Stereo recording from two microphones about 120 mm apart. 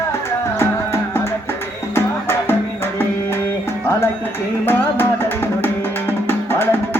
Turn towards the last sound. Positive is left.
turn(degrees=20)  # may be behind; listen again after turning